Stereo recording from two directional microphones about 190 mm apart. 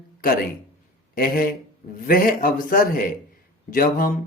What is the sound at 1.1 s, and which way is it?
Speech, 50° left (ahead or behind).